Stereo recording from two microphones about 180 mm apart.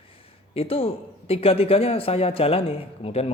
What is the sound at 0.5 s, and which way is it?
A man's voice, 30° left (ahead or behind).